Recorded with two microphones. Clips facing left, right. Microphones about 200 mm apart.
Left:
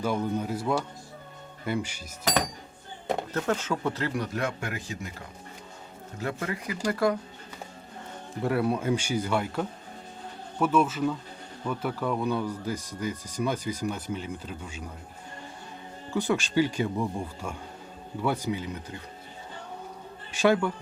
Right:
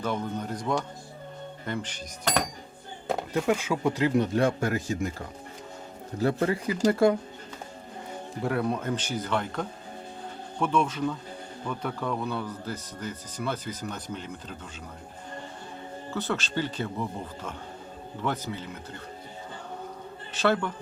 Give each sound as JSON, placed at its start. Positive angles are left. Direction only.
{"t": 0.0, "sound": "speech", "side_deg": 10}
{"t": 3.3, "sound": "speech", "side_deg": -10}
{"t": 6.1, "sound": "speech", "side_deg": -35}
{"t": 8.4, "sound": "speech", "side_deg": 5}
{"t": 16.1, "sound": "speech", "side_deg": 15}
{"t": 20.3, "sound": "speech", "side_deg": 10}